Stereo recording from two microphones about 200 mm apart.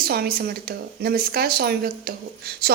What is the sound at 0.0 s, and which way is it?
A woman's voice, 50° right (ahead or behind).